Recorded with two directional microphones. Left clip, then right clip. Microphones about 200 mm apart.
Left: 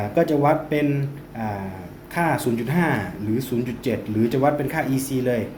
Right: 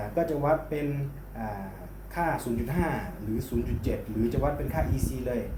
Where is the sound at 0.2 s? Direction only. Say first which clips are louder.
Left 7 dB; 50° left (ahead or behind).